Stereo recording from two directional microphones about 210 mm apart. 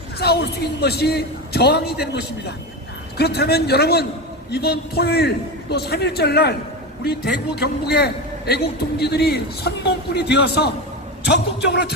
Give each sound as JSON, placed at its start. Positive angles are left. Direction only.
{"t": 0.2, "sound": "a man's voice", "side_deg": 50}